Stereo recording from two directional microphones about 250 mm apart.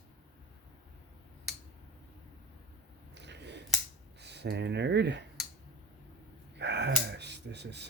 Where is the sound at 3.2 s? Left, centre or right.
Right.